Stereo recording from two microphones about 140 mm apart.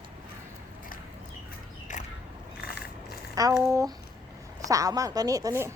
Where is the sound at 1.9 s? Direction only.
65° left (ahead or behind).